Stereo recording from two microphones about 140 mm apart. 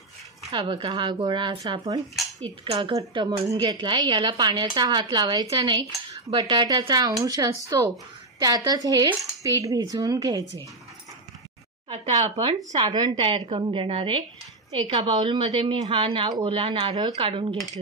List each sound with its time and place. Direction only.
0.5 s a woman's voice: 35° right (ahead or behind)
11.9 s speech: 55° right (ahead or behind)
12.7 s a woman's voice: 30° right (ahead or behind)